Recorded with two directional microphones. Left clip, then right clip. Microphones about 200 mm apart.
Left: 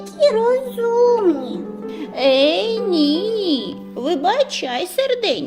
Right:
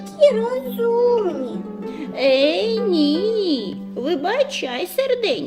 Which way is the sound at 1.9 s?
25° left (ahead or behind).